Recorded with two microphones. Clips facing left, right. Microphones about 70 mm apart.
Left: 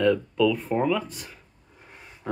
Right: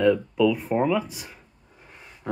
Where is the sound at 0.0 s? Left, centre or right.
Centre.